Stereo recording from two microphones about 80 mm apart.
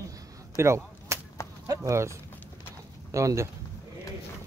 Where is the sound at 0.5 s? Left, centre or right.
Right.